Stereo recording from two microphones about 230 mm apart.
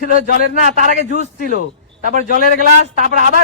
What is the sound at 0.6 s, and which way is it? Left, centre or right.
A man's voice, right.